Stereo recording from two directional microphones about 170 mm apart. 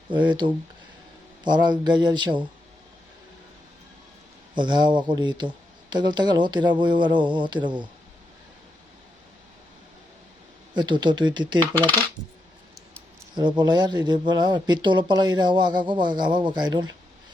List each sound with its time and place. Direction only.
0.1 s speech: 25° right (ahead or behind)
4.5 s speech: 25° right (ahead or behind)
10.8 s speech: 25° right (ahead or behind)
13.3 s speech: 25° right (ahead or behind)